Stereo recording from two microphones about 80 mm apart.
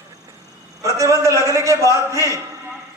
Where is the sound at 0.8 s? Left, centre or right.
Right.